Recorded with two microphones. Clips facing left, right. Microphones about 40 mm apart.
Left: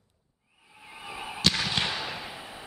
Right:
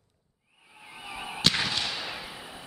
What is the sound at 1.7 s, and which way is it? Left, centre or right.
Fireworks, left.